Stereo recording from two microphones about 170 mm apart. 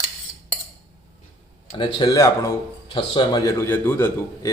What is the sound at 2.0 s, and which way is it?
Speech, 20° left (ahead or behind).